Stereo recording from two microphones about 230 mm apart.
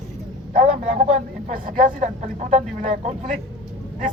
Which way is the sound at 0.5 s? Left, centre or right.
Right.